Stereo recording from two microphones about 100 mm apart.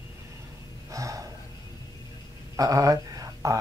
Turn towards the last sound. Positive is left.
turn(degrees=-35)  # may be behind; listen again after turning